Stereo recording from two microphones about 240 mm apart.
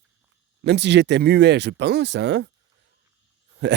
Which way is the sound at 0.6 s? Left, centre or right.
Right.